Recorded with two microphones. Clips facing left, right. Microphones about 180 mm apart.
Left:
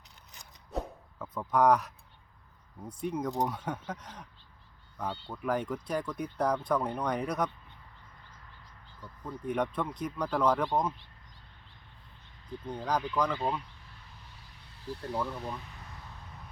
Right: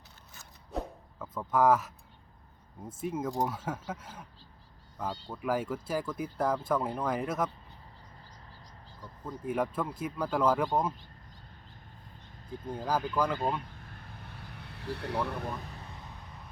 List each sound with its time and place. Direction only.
0.7 s a sound: centre (ahead or behind)
2.8 s speech: 5° right (ahead or behind)
5.3 s speech: 5° right (ahead or behind)
9.4 s speech: 5° right (ahead or behind)
12.5 s speech: 45° right (ahead or behind)
12.7 s speech: 5° right (ahead or behind)
13.6 s vehicle: 50° right (ahead or behind); by 15.4 s 65° right (ahead or behind)